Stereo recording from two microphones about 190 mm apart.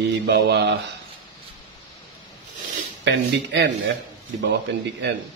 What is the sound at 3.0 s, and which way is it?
Speech, 65° right (ahead or behind).